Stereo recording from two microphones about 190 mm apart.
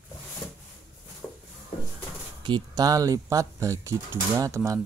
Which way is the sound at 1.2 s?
10° left (ahead or behind).